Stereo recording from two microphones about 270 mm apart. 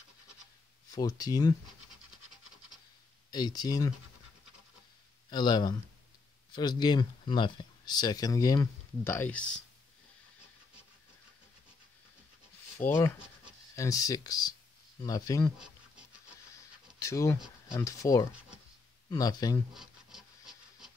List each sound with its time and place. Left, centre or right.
0.9 s speech: centre
3.3 s speech: centre
5.3 s speech: centre
12.7 s speech: centre
15.5 s a sound: centre
17.0 s speech: centre
19.7 s a sound: centre